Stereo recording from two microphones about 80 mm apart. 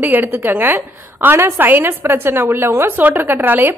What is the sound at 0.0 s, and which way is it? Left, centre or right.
A woman's voice, right.